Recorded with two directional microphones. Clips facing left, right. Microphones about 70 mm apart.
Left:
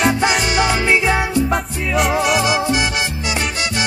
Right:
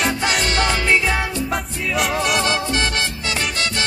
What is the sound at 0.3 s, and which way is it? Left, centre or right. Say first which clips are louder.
Music: left 3 dB; centre.